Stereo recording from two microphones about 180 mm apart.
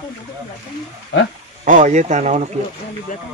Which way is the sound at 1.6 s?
45° right (ahead or behind).